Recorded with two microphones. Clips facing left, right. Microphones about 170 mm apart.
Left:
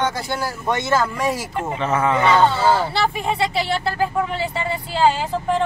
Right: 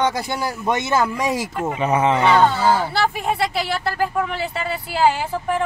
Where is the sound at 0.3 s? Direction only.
20° right (ahead or behind).